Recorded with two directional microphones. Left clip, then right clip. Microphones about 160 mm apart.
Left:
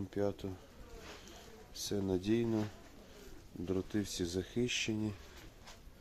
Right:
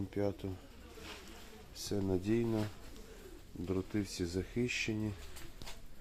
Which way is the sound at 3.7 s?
15° left (ahead or behind).